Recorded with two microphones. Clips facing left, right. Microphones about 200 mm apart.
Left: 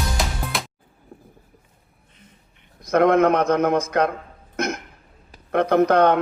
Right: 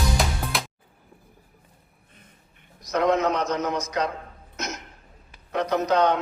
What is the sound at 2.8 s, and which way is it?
Speech, 55° left (ahead or behind).